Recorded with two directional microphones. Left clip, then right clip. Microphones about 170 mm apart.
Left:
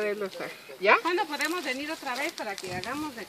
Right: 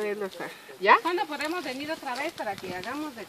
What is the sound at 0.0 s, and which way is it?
Speech, 25° right (ahead or behind).